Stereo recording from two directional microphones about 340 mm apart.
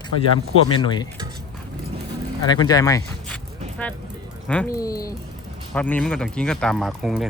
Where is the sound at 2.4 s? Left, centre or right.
Centre.